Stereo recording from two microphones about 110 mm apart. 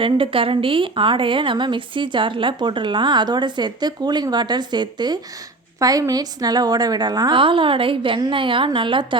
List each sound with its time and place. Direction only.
0.0 s a woman's voice: 55° right (ahead or behind)